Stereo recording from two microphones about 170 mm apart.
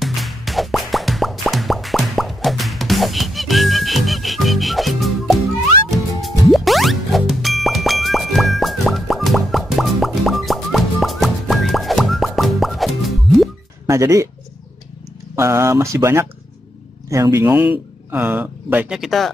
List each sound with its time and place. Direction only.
0.0 s plop: centre (ahead or behind)
6.2 s music: centre (ahead or behind)
13.8 s speech: 15° right (ahead or behind)
15.3 s speech: 15° right (ahead or behind); by 19.3 s centre (ahead or behind)